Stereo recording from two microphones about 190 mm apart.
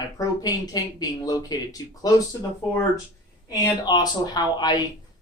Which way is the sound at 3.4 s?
20° left (ahead or behind).